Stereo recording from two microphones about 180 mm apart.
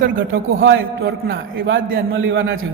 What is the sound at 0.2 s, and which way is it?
A man's voice, 90° right.